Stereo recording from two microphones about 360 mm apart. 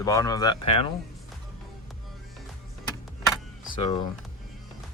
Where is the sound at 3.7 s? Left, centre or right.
Centre.